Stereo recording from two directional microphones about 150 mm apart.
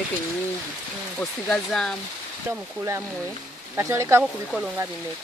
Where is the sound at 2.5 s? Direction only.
20° right (ahead or behind).